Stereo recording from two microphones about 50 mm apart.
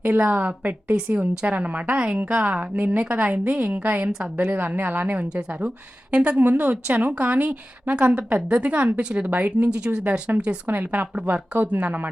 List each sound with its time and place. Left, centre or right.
0.2 s a woman's voice: right
5.3 s speech: right
6.4 s a woman's voice: right
10.7 s a woman's voice: right